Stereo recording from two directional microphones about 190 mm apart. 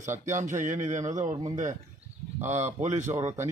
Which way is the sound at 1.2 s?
20° right (ahead or behind).